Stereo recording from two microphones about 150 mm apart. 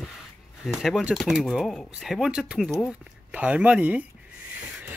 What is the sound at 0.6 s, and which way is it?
Speech, centre (ahead or behind).